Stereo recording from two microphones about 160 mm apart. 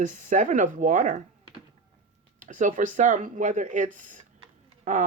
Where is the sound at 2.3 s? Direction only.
50° right (ahead or behind).